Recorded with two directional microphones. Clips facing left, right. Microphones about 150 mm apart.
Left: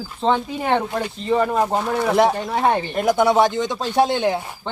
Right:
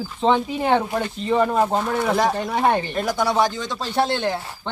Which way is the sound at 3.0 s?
20° left (ahead or behind).